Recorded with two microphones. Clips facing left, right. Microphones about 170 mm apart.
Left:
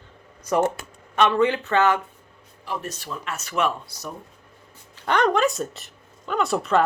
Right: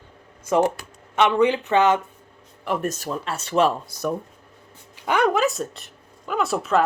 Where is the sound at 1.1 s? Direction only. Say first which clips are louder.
Right 1 dB; 15° right (ahead or behind).